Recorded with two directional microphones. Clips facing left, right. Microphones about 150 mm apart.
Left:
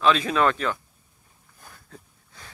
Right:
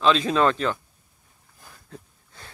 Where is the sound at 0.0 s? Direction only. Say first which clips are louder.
Right 1 dB; 25° right (ahead or behind).